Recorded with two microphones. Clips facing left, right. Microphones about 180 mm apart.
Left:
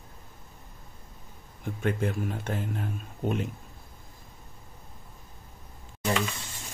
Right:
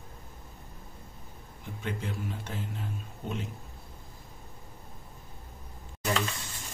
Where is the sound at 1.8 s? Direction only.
55° left (ahead or behind).